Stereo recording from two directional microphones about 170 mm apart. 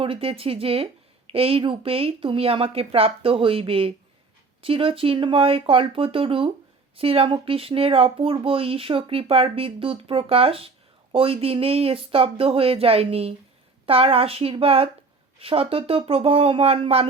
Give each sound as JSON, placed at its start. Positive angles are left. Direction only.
{"t": 0.0, "sound": "speech", "side_deg": -30}